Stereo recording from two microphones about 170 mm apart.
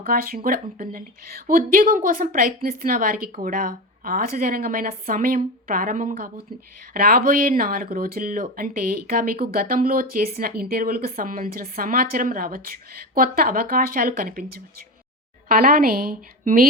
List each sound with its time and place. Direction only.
0.0 s speech: 60° right (ahead or behind)